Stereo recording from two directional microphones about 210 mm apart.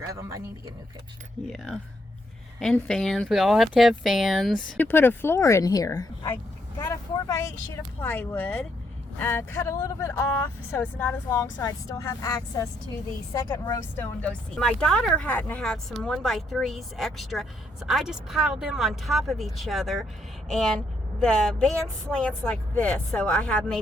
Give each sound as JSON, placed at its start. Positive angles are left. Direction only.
{"t": 0.1, "sound": "speech", "side_deg": -15}
{"t": 1.5, "sound": "a woman's voice", "side_deg": 0}